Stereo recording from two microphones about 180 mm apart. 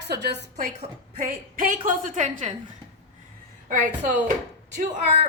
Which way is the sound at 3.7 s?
45° right (ahead or behind).